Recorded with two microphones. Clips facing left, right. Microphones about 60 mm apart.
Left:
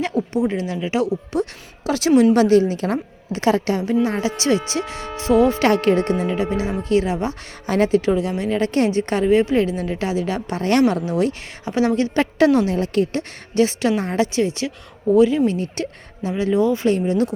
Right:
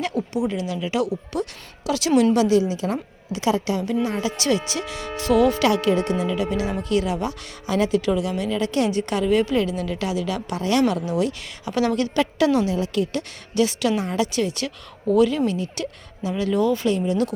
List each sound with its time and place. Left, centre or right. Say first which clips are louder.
0.0 s a woman's voice: left 3 dB; left
2.3 s a woman's voice: left 4 dB; left
5.6 s a woman's voice: left 3 dB; left
10.8 s a woman's voice: left 3 dB; left
12.5 s a woman's voice: left 3 dB; left
15.4 s a woman's voice: left 3 dB; left
16.3 s a woman's voice: left 3 dB; left